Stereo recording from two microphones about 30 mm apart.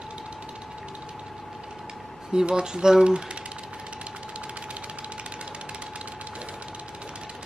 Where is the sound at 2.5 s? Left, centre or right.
Right.